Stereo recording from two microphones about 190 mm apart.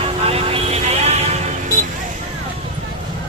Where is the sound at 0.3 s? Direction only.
30° right (ahead or behind).